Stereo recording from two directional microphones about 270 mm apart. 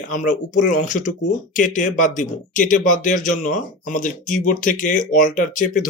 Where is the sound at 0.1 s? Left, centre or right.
Left.